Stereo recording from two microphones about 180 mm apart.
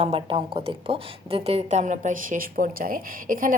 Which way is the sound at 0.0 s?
30° right (ahead or behind).